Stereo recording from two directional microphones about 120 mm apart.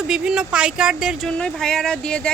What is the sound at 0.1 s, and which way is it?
Speech, 5° right (ahead or behind).